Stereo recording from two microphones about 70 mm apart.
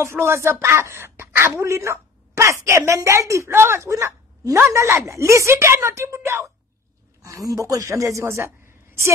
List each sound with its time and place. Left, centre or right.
0.0 s a woman's voice: right